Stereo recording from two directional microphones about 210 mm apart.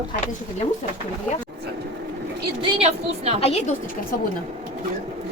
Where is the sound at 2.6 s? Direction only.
25° right (ahead or behind).